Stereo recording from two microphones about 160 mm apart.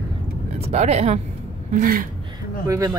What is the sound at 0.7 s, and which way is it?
Speech, 40° right (ahead or behind).